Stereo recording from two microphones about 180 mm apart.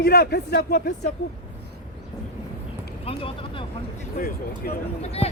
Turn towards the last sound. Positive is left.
turn(degrees=35)  # may be behind; listen again after turning